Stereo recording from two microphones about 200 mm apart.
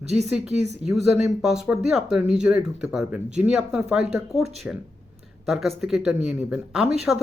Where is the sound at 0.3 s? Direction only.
5° right (ahead or behind).